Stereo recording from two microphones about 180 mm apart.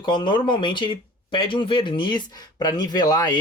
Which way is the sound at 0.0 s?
25° left (ahead or behind).